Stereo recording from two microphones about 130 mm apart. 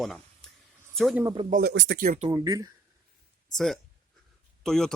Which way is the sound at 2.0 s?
90° right.